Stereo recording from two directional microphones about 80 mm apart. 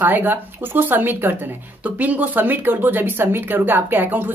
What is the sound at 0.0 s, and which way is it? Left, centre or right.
Speech, right.